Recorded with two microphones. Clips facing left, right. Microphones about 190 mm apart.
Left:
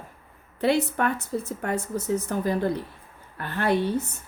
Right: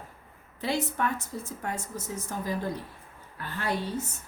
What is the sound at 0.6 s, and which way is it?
Speech, 65° left (ahead or behind).